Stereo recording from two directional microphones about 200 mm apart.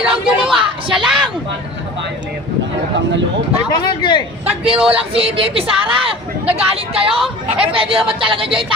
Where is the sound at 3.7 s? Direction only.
20° left (ahead or behind).